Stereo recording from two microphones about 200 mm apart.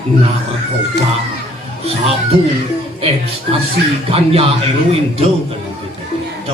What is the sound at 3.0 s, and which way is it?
Speech, 30° right (ahead or behind).